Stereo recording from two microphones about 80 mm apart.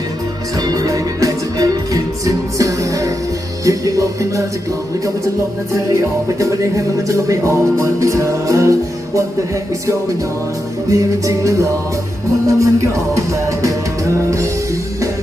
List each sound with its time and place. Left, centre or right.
0.7 s music: right
6.4 s music: right
10.8 s music: right